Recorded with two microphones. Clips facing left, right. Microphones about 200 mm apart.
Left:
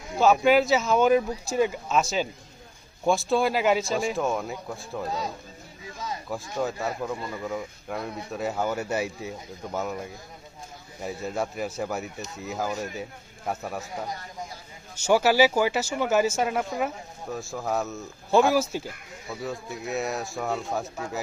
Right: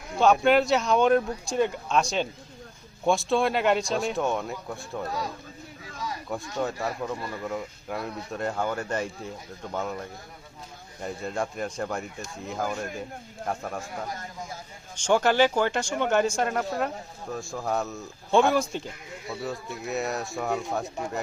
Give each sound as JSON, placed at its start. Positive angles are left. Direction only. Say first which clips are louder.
{"t": 0.2, "sound": "speech", "louder": "left 1 dB", "side_deg": 0}
{"t": 5.0, "sound": "speech", "louder": "left 1 dB", "side_deg": 20}
{"t": 5.8, "sound": "a sound", "louder": "left 1 dB", "side_deg": 25}
{"t": 6.2, "sound": "speech", "louder": "left 1 dB", "side_deg": 0}
{"t": 14.9, "sound": "speech", "louder": "left 1 dB", "side_deg": 5}